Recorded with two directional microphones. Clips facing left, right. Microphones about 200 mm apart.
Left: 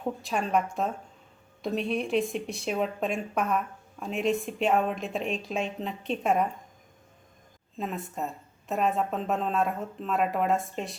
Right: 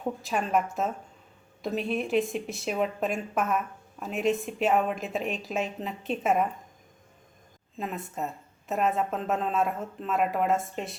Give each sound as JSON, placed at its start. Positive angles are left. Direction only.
{"t": 0.0, "sound": "a woman's voice", "side_deg": 0}
{"t": 7.8, "sound": "a woman's voice", "side_deg": 0}